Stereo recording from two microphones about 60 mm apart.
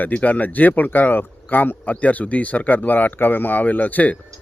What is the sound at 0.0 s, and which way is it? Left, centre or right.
A man's voice, left.